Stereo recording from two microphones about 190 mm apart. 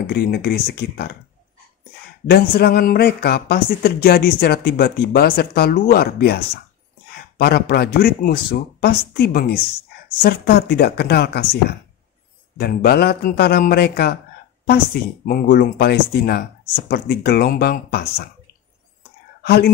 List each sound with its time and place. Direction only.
0.0 s speech: 55° left (ahead or behind)
2.2 s speech: 55° left (ahead or behind)
12.5 s speech: 55° left (ahead or behind)
15.2 s speech: 50° left (ahead or behind)
19.4 s a woman's voice: 60° left (ahead or behind)